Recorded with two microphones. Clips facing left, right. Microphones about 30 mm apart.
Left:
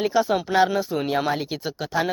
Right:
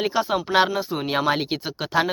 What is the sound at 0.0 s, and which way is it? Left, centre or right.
Speech, right.